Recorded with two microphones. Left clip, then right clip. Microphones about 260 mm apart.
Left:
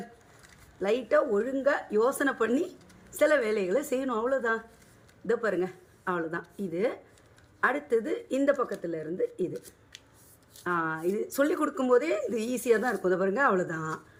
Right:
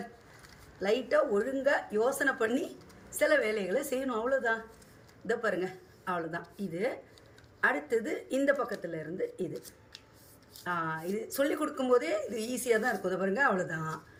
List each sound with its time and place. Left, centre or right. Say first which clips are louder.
0.8 s a woman's voice: left 2 dB; centre
10.6 s a woman's voice: left 4 dB; centre